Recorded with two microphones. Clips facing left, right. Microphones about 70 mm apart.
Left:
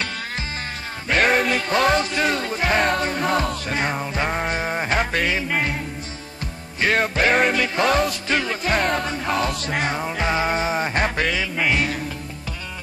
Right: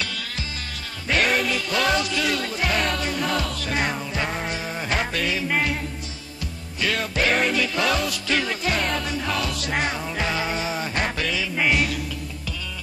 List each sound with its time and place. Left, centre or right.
1.0 s music: left
6.8 s music: left
8.7 s music: left